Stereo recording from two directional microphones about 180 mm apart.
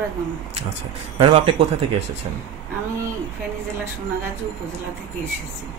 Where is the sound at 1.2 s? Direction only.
30° right (ahead or behind).